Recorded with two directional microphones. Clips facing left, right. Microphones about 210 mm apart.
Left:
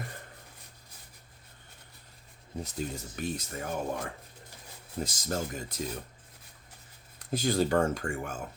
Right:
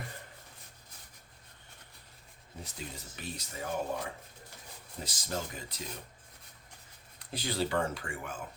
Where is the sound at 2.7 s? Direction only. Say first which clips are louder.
Left 9 dB; 50° left (ahead or behind).